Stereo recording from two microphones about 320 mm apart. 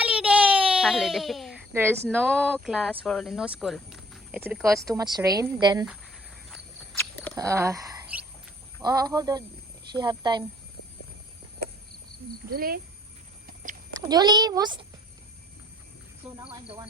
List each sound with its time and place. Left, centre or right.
0.0 s a sound: centre
2.1 s a woman's voice: centre
7.3 s a woman's voice: centre
12.5 s speech: right
14.1 s a woman's voice: centre
16.5 s a woman's voice: centre